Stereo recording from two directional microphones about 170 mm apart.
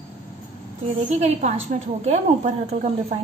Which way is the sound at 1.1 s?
40° right (ahead or behind).